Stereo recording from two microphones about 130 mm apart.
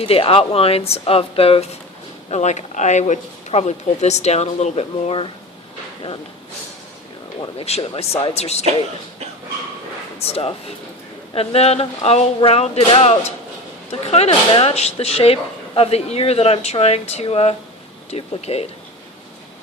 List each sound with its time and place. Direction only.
0.0 s speech: 45° left (ahead or behind)
2.3 s speech: 60° left (ahead or behind)
7.6 s speech: 50° left (ahead or behind)
10.2 s speech: 50° left (ahead or behind)